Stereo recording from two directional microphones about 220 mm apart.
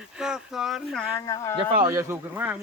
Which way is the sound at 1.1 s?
15° left (ahead or behind).